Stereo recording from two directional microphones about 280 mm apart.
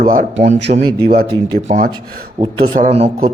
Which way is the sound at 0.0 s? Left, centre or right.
Right.